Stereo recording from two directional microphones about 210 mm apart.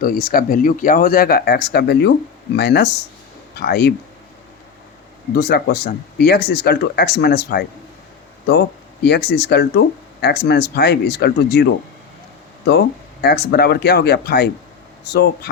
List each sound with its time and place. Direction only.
0.0 s speech: 45° left (ahead or behind)
5.4 s speech: 50° left (ahead or behind)
9.0 s speech: 55° left (ahead or behind)
13.2 s speech: 50° left (ahead or behind)